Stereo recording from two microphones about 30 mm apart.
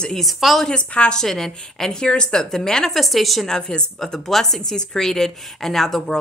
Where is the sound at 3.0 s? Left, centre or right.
Centre.